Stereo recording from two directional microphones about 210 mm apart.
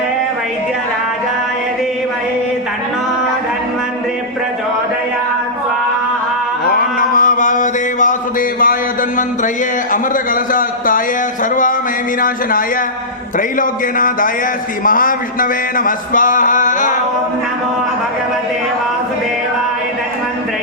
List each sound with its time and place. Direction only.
6.7 s mantra: 40° left (ahead or behind)
9.9 s a sound: 40° left (ahead or behind)
12.2 s a man's voice: 40° left (ahead or behind)